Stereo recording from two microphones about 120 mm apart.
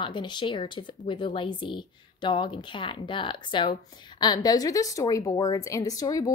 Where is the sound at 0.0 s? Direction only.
40° left (ahead or behind).